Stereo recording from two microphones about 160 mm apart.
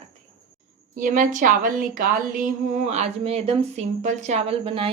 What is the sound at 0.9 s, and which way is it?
A woman's voice, 55° right (ahead or behind).